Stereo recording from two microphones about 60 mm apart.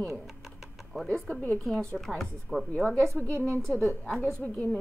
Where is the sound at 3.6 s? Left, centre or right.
Centre.